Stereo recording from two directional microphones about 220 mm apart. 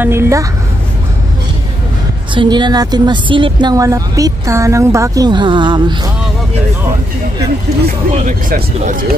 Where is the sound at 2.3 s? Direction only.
20° right (ahead or behind).